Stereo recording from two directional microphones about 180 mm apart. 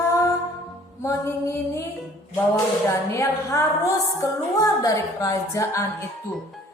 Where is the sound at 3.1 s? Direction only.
15° left (ahead or behind).